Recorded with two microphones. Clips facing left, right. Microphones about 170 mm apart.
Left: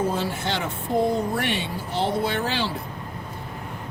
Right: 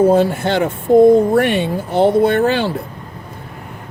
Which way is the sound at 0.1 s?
55° right (ahead or behind).